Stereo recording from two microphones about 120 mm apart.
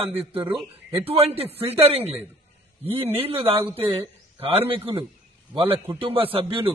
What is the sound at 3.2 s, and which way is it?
A man's voice, 50° right (ahead or behind).